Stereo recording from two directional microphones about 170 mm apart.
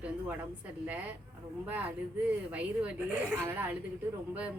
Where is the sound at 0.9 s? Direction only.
10° right (ahead or behind).